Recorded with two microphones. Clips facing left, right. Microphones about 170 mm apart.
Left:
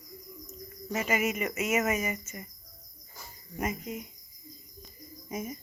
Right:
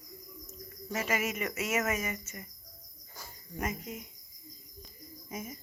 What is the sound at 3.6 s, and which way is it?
Speech, 10° left (ahead or behind).